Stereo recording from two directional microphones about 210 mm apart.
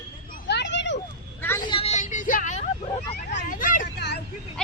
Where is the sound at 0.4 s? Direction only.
55° left (ahead or behind).